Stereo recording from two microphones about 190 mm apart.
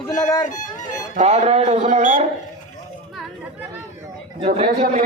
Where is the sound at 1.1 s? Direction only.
35° right (ahead or behind).